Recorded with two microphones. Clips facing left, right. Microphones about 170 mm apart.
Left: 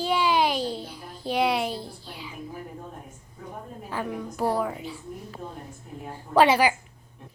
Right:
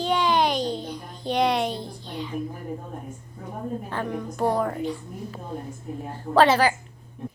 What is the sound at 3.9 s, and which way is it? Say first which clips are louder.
A woman's voice: right 2 dB; 5° left (ahead or behind).